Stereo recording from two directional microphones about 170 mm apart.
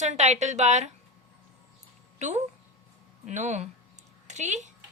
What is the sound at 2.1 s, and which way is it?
A woman's voice, 45° right (ahead or behind).